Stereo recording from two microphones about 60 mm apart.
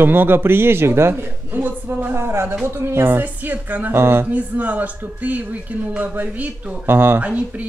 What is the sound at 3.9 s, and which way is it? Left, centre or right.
Speech, right.